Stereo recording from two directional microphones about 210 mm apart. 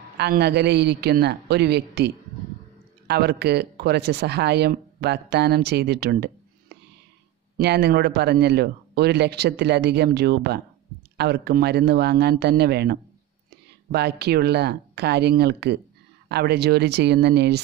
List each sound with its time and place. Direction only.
0.2 s speech: 50° right (ahead or behind)
7.5 s speech: 50° right (ahead or behind)